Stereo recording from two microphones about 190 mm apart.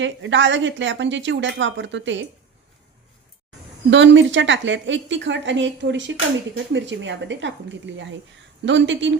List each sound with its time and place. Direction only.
0.0 s a woman's voice: 75° right (ahead or behind)
3.8 s a woman's voice: 75° right (ahead or behind)